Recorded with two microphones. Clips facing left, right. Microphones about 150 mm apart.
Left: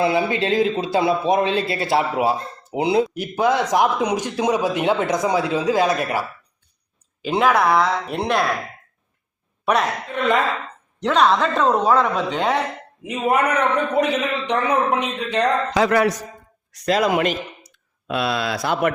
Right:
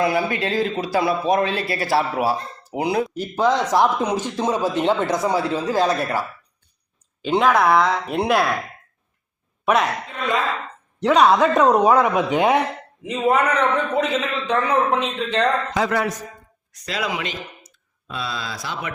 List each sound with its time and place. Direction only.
0.0 s speech: 25° left (ahead or behind)
3.4 s speech: 15° left (ahead or behind); by 8.4 s 5° right (ahead or behind)
11.0 s speech: 10° right (ahead or behind)
13.1 s speech: 10° left (ahead or behind)
15.7 s a man's voice: 80° left
16.8 s a man's voice: 50° left (ahead or behind)
18.1 s speech: 70° left (ahead or behind)